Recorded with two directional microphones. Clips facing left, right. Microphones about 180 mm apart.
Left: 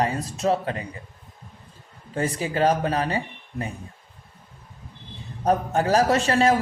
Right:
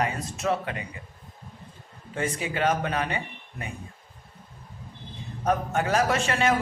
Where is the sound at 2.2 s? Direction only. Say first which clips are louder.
Left 4 dB; 35° left (ahead or behind).